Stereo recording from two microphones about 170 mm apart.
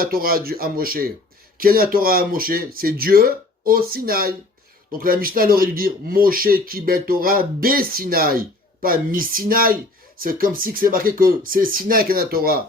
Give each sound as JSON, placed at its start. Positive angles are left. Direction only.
{"t": 0.0, "sound": "a man's voice", "side_deg": -60}